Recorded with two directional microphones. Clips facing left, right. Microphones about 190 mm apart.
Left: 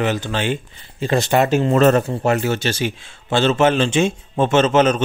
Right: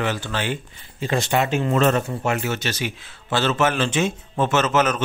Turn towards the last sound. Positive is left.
turn(degrees=30)  # may be behind; listen again after turning